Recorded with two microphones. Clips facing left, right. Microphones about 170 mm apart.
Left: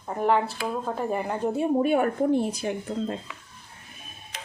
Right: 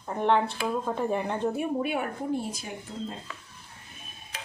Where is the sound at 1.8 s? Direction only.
50° left (ahead or behind).